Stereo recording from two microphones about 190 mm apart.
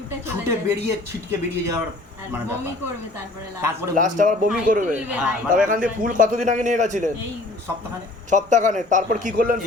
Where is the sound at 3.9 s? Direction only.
45° right (ahead or behind).